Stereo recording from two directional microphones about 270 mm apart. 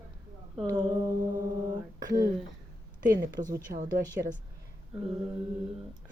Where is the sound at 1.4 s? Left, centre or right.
Centre.